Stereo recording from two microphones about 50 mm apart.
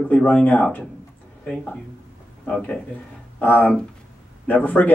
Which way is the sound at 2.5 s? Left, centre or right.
Centre.